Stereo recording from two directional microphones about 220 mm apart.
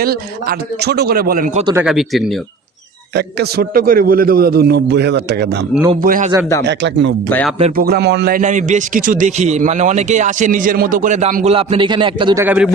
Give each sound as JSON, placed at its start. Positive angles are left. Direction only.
{"t": 0.0, "sound": "a man's voice", "side_deg": -45}
{"t": 1.8, "sound": "speech", "side_deg": 0}
{"t": 3.2, "sound": "a man's voice", "side_deg": -45}
{"t": 6.0, "sound": "a man's voice", "side_deg": -40}
{"t": 6.6, "sound": "a man's voice", "side_deg": -50}
{"t": 7.3, "sound": "speech", "side_deg": 10}
{"t": 7.8, "sound": "a man's voice", "side_deg": -45}
{"t": 11.5, "sound": "a man's voice", "side_deg": -25}